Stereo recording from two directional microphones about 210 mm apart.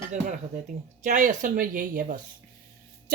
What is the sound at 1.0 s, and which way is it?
Speech, 35° right (ahead or behind).